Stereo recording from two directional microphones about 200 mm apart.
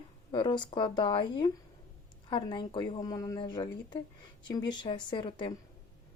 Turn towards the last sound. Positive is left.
turn(degrees=25)  # may be behind; listen again after turning